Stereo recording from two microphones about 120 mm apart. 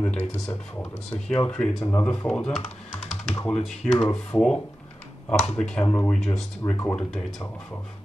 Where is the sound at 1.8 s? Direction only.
25° left (ahead or behind).